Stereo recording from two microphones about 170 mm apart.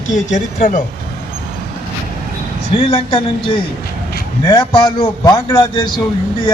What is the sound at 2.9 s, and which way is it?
Speech, 30° left (ahead or behind).